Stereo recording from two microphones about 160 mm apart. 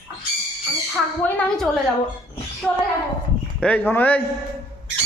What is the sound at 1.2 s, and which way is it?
A man's voice, 10° left (ahead or behind).